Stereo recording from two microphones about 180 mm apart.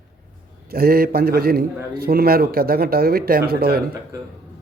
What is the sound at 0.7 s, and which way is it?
A man's voice, 55° right (ahead or behind).